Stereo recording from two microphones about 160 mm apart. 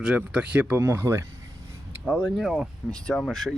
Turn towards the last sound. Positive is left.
turn(degrees=5)  # may be behind; listen again after turning